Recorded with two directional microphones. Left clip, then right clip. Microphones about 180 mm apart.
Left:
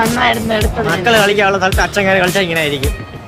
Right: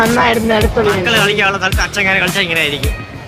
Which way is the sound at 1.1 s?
55° left (ahead or behind).